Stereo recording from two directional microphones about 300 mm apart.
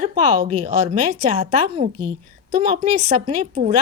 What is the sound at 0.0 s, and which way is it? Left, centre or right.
A woman's voice, right.